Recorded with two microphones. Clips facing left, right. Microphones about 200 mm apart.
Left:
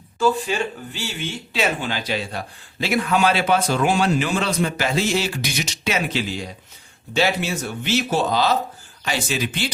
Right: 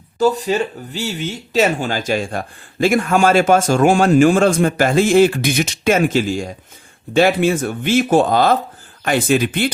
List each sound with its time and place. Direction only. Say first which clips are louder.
0.2 s a man's voice: right 4 dB; 40° right (ahead or behind)